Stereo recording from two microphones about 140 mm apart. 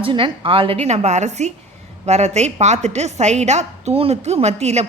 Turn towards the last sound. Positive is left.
turn(degrees=-50)  # may be behind; listen again after turning